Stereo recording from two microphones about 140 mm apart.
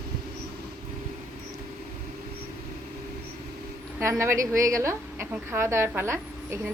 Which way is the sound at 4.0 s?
20° right (ahead or behind).